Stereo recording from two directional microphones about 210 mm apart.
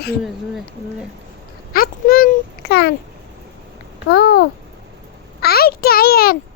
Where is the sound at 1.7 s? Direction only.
45° left (ahead or behind).